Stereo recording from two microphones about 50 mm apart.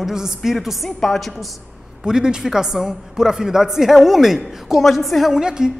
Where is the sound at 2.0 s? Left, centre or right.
Centre.